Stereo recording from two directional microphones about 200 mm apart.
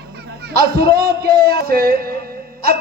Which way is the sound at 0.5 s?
50° right (ahead or behind).